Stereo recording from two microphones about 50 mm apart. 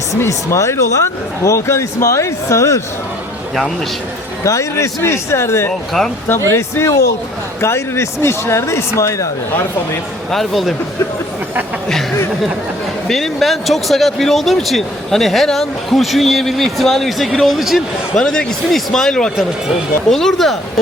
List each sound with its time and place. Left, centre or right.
0.3 s speech: left
1.5 s speech: left
4.4 s speech: left
7.6 s speech: left
9.0 s speech: left
10.3 s speech: centre
13.1 s speech: centre
18.1 s speech: centre